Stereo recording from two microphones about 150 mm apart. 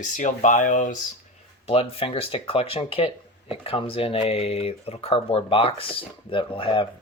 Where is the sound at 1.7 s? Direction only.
40° left (ahead or behind).